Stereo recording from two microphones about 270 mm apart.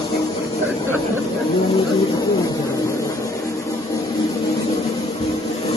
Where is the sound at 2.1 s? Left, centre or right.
Centre.